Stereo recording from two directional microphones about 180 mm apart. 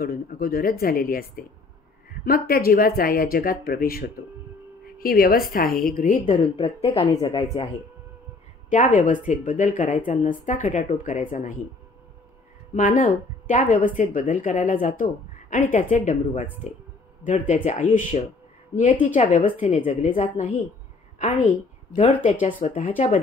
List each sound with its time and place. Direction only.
0.0 s a woman's voice: 55° left (ahead or behind); by 7.1 s 35° left (ahead or behind)
7.1 s a woman's voice: 20° left (ahead or behind)
8.6 s speech: 45° left (ahead or behind)
12.7 s speech: 40° left (ahead or behind)
22.6 s speech: 40° left (ahead or behind)